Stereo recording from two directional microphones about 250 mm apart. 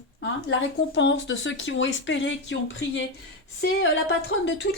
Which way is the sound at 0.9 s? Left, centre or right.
Left.